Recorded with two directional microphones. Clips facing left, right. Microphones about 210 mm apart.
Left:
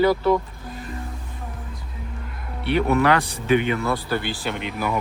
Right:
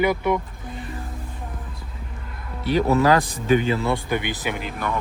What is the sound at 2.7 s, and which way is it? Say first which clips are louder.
Speech: right 1 dB; 35° right (ahead or behind).